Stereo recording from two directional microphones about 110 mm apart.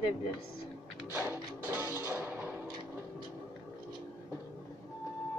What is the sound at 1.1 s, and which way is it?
Music, 15° right (ahead or behind).